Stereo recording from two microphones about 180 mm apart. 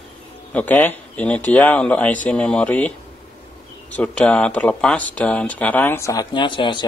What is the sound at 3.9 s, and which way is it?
Speech, 5° left (ahead or behind).